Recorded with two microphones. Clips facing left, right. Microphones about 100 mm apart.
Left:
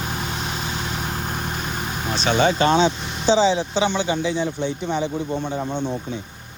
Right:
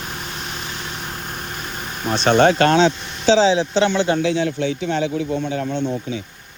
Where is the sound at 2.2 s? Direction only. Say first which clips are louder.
Right 5 dB; 60° right (ahead or behind); by 5.1 s 90° right.